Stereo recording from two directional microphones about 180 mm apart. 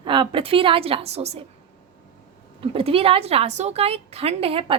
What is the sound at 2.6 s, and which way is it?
A woman's voice, 30° right (ahead or behind).